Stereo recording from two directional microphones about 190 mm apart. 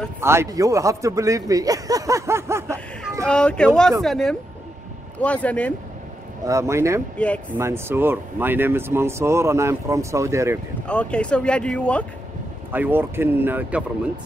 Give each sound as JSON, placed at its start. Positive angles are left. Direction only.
{"t": 0.2, "sound": "a man's voice", "side_deg": -15}
{"t": 3.3, "sound": "speech", "side_deg": 5}
{"t": 6.4, "sound": "a man's voice", "side_deg": -15}
{"t": 7.2, "sound": "speech", "side_deg": 5}
{"t": 7.5, "sound": "a man's voice", "side_deg": -15}
{"t": 10.9, "sound": "speech", "side_deg": 5}
{"t": 12.7, "sound": "a man's voice", "side_deg": -10}